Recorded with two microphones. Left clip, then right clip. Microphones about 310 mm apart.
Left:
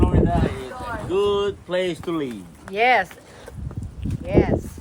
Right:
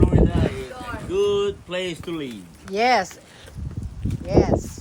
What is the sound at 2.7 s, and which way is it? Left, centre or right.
Speech, centre.